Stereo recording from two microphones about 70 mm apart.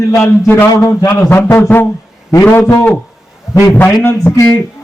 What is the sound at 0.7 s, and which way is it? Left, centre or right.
Speech, left.